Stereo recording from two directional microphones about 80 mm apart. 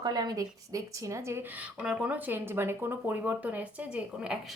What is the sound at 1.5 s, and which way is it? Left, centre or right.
Speech, centre.